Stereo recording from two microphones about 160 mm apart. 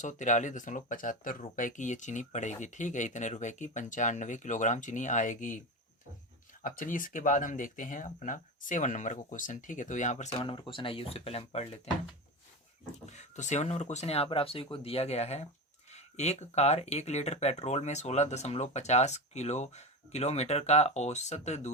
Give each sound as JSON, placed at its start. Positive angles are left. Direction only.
{"t": 0.0, "sound": "speech", "side_deg": 50}
{"t": 10.3, "sound": "speech", "side_deg": 35}
{"t": 13.1, "sound": "speech", "side_deg": 50}